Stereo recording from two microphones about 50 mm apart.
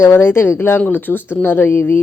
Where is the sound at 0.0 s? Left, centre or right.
Left.